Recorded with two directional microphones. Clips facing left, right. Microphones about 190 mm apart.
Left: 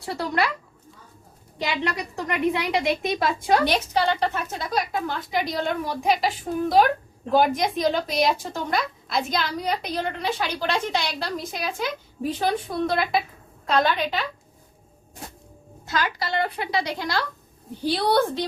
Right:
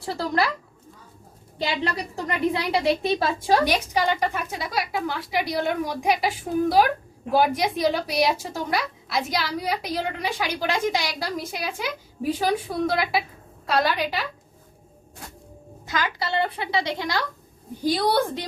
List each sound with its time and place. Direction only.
1.8 s a woman's voice: 35° right (ahead or behind)
3.7 s speech: 10° right (ahead or behind)
15.9 s a woman's voice: 20° right (ahead or behind)